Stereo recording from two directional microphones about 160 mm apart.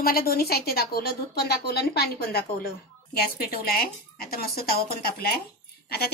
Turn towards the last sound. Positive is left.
turn(degrees=75)  # may be behind; listen again after turning